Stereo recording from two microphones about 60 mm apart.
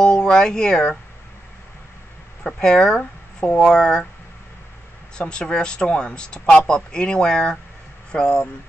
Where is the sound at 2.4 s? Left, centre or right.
Centre.